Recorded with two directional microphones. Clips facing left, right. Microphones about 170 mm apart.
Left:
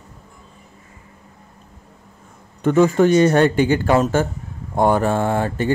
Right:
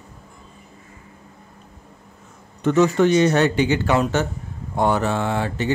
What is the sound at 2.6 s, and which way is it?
Speech, 50° left (ahead or behind).